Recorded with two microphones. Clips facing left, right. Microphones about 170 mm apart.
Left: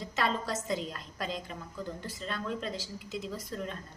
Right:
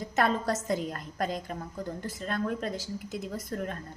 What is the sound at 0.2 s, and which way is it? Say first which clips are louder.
A woman's voice: right 5 dB; 50° right (ahead or behind).